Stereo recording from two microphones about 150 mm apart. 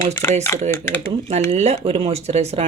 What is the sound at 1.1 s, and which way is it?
Speech, 45° right (ahead or behind).